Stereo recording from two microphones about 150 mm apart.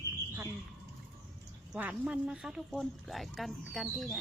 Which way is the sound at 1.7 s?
10° right (ahead or behind).